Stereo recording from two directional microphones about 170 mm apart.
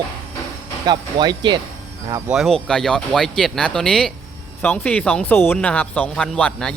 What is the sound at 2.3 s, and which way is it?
Speech, centre (ahead or behind).